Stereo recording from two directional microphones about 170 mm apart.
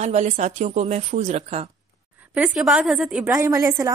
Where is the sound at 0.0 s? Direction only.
45° right (ahead or behind).